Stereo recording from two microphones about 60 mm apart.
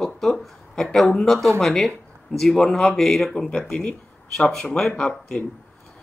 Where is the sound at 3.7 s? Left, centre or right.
Centre.